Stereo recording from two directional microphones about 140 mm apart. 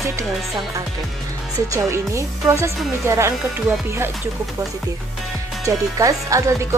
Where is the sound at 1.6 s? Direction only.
20° right (ahead or behind).